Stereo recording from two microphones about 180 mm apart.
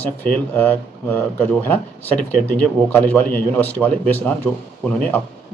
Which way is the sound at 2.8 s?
10° left (ahead or behind).